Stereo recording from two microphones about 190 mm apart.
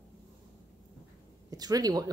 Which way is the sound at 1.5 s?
20° right (ahead or behind).